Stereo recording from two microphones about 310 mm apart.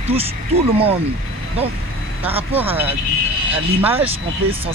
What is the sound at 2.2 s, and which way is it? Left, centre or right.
Vehicle, centre.